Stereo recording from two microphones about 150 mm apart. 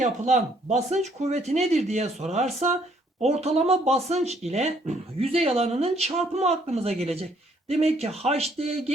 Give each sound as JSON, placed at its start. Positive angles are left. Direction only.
{"t": 0.0, "sound": "speech", "side_deg": -50}